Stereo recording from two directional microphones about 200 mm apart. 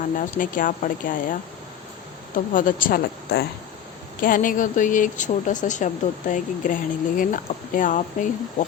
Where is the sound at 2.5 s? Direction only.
45° left (ahead or behind).